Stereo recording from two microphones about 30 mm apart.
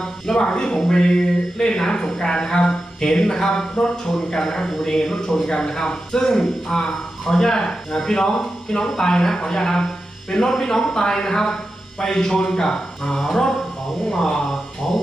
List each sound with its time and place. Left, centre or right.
0.3 s speech: left
3.8 s speech: left
12.0 s speech: centre